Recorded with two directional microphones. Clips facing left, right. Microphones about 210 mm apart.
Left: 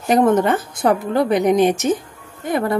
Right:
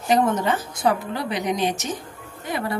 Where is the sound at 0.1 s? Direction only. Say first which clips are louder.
Left 6 dB; 55° left (ahead or behind).